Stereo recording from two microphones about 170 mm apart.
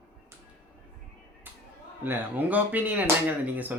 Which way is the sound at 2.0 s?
10° right (ahead or behind).